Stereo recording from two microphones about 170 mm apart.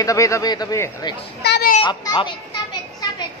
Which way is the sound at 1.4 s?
70° left (ahead or behind).